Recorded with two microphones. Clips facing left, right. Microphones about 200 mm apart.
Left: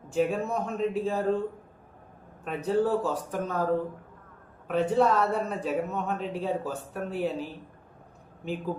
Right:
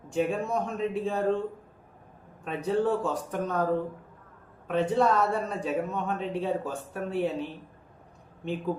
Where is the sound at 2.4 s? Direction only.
5° left (ahead or behind).